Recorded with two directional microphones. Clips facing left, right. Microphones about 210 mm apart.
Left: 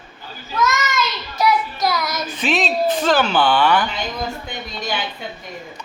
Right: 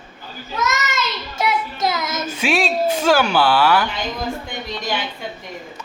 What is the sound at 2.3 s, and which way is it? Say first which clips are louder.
Speech: right 1 dB; 10° right (ahead or behind).